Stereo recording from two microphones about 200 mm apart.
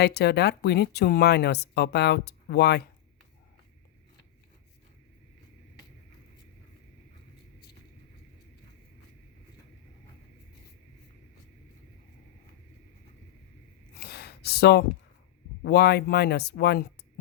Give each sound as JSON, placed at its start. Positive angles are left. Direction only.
{"t": 0.0, "sound": "speech", "side_deg": 55}
{"t": 14.0, "sound": "a sound", "side_deg": 55}
{"t": 15.6, "sound": "speech", "side_deg": 55}